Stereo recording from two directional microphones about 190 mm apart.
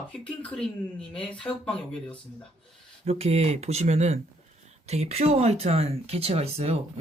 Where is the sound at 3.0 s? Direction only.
30° right (ahead or behind).